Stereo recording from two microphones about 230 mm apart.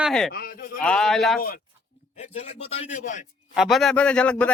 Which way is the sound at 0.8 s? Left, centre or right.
Centre.